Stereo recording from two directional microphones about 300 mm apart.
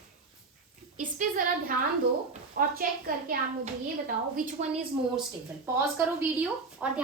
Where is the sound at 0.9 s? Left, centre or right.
Right.